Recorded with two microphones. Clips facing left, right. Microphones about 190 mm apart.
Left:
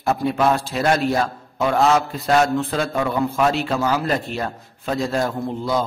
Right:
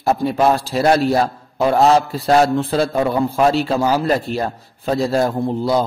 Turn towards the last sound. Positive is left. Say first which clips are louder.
# right 5 dB
turn(degrees=-35)  # may be behind; listen again after turning